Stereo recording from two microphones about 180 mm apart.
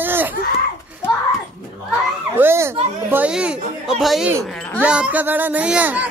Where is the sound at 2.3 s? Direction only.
15° right (ahead or behind).